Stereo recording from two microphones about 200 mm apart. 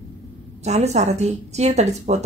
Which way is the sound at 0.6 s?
35° right (ahead or behind).